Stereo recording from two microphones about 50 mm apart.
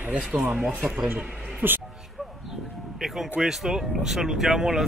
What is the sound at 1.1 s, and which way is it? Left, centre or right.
Speech, right.